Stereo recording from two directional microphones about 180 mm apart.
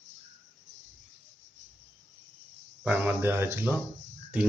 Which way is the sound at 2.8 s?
10° right (ahead or behind).